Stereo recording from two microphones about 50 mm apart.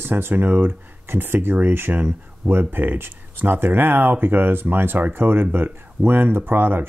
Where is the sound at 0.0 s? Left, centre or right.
Right.